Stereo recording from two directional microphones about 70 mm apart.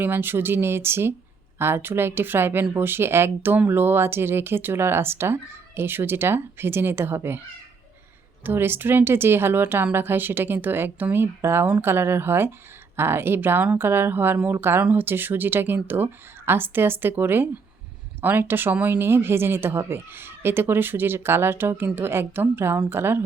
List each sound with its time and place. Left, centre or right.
0.0 s speech: right
8.4 s speech: right